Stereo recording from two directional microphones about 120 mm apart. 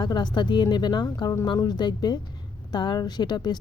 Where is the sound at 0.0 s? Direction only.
35° left (ahead or behind).